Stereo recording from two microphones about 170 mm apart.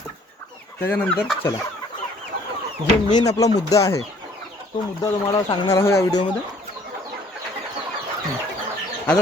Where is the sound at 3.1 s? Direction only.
25° left (ahead or behind).